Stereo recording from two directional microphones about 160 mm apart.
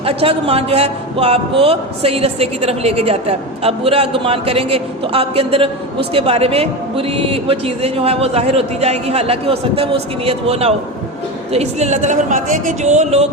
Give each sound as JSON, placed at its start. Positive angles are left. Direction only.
{"t": 0.0, "sound": "a woman's voice", "side_deg": -35}